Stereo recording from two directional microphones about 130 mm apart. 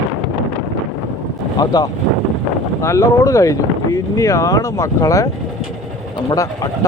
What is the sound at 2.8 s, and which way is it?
Speech, 25° left (ahead or behind).